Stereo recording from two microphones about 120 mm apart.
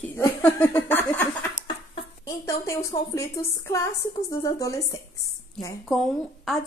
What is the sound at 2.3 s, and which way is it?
Speech, 25° left (ahead or behind).